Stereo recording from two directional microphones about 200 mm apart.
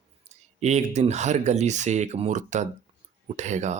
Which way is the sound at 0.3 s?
35° right (ahead or behind).